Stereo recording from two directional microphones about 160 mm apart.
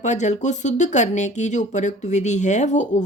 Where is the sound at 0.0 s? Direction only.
50° left (ahead or behind).